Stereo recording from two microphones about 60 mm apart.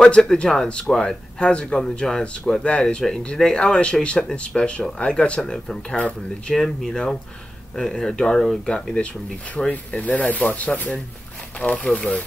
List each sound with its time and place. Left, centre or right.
0.0 s speech: centre
6.5 s speech: centre